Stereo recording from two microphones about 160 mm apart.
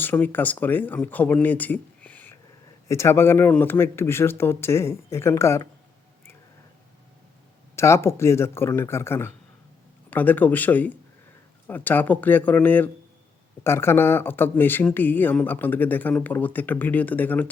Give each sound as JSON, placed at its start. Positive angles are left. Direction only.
{"t": 0.0, "sound": "speech", "side_deg": 10}
{"t": 7.8, "sound": "speech", "side_deg": 15}